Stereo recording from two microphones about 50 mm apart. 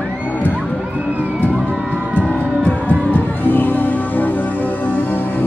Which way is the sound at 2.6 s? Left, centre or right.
Left.